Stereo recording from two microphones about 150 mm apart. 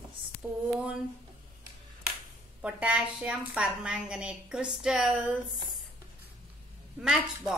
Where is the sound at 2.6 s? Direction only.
10° right (ahead or behind).